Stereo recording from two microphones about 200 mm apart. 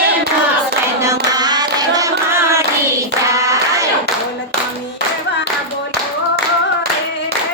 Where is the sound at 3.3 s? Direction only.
15° right (ahead or behind).